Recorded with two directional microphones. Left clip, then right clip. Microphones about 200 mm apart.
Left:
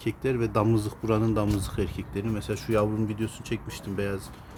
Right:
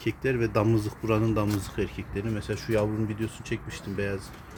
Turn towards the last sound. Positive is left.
turn(degrees=0)  # may be behind; listen again after turning